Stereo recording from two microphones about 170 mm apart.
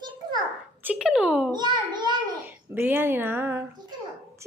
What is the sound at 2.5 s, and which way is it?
Speech, 10° right (ahead or behind).